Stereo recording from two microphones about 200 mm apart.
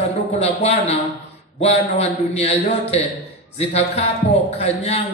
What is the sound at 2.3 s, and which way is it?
A man's voice, 30° left (ahead or behind).